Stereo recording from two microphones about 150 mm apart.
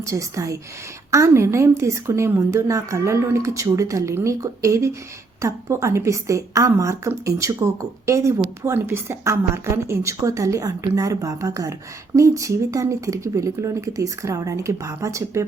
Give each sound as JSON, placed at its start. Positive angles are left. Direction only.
{"t": 0.0, "sound": "a woman's voice", "side_deg": -20}